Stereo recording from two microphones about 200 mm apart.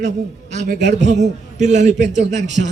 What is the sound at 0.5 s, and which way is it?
A man's voice, 40° right (ahead or behind).